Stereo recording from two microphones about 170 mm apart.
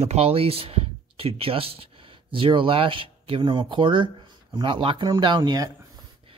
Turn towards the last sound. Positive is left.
turn(degrees=-25)  # may be behind; listen again after turning